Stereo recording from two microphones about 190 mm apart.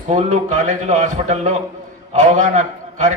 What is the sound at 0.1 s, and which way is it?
A man's voice, 35° right (ahead or behind).